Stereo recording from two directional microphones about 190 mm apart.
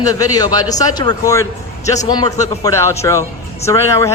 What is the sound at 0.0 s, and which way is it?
Speech, 20° left (ahead or behind).